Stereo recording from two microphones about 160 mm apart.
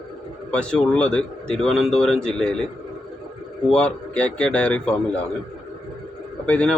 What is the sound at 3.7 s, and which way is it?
A man's voice, 5° left (ahead or behind).